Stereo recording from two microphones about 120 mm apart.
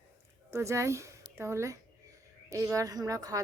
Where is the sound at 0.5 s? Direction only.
25° right (ahead or behind).